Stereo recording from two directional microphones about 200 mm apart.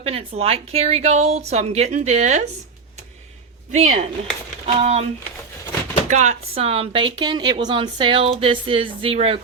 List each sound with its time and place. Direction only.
0.0 s speech: 30° right (ahead or behind)
3.7 s speech: 35° right (ahead or behind)
6.1 s speech: 35° right (ahead or behind)